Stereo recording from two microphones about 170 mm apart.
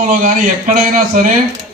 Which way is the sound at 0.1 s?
50° right (ahead or behind).